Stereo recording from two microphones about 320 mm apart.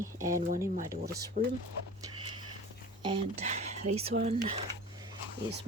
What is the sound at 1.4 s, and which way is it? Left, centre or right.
Speech, right.